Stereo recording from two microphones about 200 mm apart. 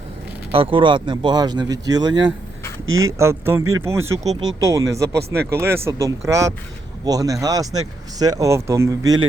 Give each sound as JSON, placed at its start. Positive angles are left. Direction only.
{"t": 0.5, "sound": "speech", "side_deg": -25}
{"t": 2.8, "sound": "speech", "side_deg": -90}
{"t": 3.2, "sound": "speech", "side_deg": -15}
{"t": 3.6, "sound": "speech", "side_deg": -90}
{"t": 3.8, "sound": "speech", "side_deg": -15}
{"t": 5.0, "sound": "speech", "side_deg": -55}
{"t": 5.5, "sound": "speech", "side_deg": -10}